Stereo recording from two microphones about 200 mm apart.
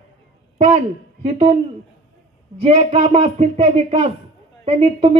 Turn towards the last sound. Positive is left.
turn(degrees=-30)  # may be behind; listen again after turning